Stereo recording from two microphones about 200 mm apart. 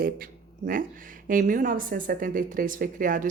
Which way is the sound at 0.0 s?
45° right (ahead or behind).